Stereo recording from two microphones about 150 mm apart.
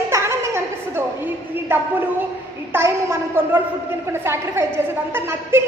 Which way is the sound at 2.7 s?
15° right (ahead or behind).